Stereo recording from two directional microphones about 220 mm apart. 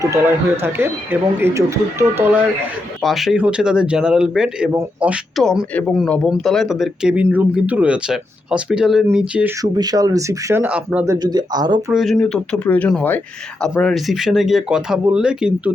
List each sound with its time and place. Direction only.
0.0 s speech: 10° right (ahead or behind)
9.6 s speech: 20° right (ahead or behind)
11.9 s speech: centre (ahead or behind)